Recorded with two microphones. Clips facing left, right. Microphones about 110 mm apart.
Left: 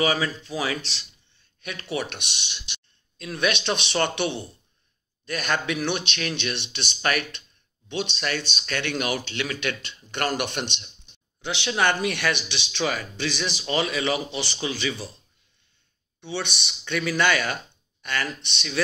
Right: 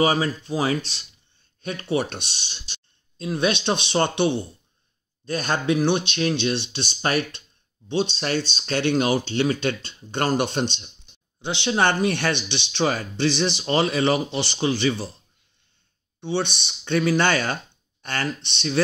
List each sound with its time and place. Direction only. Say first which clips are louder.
0.0 s speech: right 3 dB; 30° right (ahead or behind)
16.2 s speech: right 6 dB; 30° right (ahead or behind)